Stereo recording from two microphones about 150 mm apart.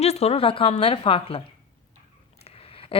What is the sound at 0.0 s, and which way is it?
Speech, 45° left (ahead or behind).